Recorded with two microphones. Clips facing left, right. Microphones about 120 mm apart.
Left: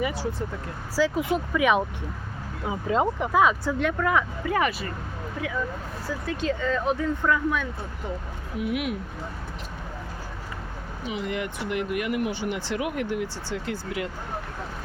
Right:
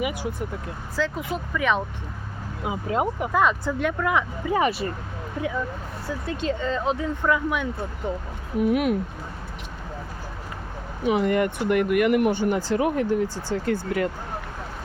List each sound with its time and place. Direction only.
0.0 s speech: 15° right (ahead or behind)
0.9 s speech: 5° left (ahead or behind)
2.6 s speech: 10° right (ahead or behind)
3.3 s speech: 5° left (ahead or behind)
4.1 s speech: 15° right (ahead or behind)
6.2 s speech: 25° right (ahead or behind)
8.5 s speech: 45° right (ahead or behind)
11.0 s speech: 55° right (ahead or behind)